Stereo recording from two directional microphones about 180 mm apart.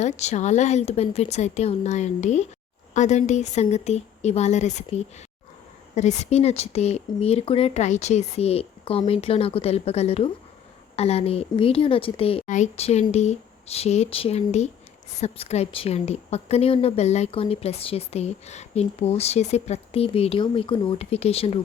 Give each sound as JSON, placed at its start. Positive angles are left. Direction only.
{"t": 0.0, "sound": "a woman's voice", "side_deg": 40}